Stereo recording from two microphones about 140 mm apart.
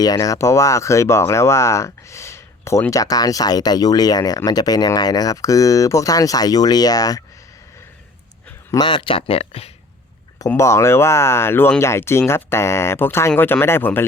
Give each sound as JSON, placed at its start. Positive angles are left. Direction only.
{"t": 0.0, "sound": "speech", "side_deg": 25}
{"t": 8.7, "sound": "speech", "side_deg": 35}
{"t": 10.5, "sound": "speech", "side_deg": 20}